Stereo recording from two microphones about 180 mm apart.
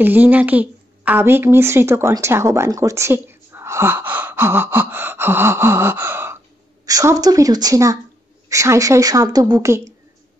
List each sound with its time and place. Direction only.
0.0 s a woman's voice: 10° right (ahead or behind)